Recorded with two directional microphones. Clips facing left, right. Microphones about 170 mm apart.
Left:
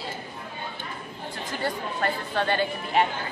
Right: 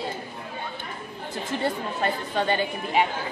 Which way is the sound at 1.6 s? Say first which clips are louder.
Even; 20° right (ahead or behind).